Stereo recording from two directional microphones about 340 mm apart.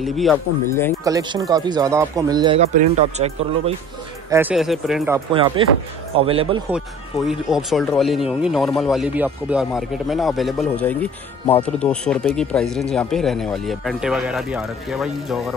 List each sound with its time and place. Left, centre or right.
0.0 s speech: centre
1.0 s speech: centre
4.3 s speech: centre
7.2 s speech: centre